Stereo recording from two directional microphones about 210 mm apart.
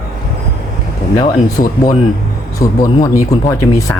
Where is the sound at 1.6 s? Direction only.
30° left (ahead or behind).